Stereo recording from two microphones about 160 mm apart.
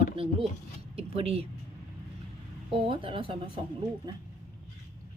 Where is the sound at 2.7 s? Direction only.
35° right (ahead or behind).